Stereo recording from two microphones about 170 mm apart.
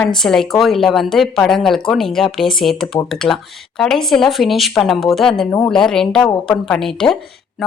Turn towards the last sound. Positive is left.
turn(degrees=0)  # may be behind; listen again after turning